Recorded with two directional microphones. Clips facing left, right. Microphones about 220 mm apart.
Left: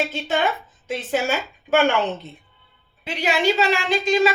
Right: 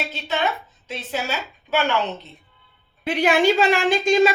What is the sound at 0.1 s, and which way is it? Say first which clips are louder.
A woman's voice: left 2 dB; 50° left (ahead or behind).